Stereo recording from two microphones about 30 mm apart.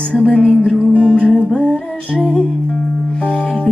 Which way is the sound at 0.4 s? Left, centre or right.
Left.